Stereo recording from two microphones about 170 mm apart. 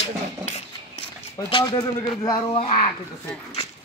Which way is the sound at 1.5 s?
25° left (ahead or behind).